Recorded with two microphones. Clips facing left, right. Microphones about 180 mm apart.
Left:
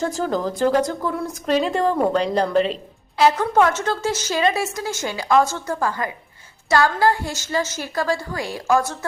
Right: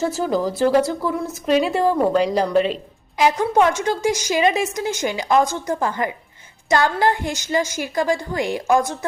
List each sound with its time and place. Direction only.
0.0 s a woman's voice: 5° right (ahead or behind)
3.2 s a woman's voice: 15° right (ahead or behind)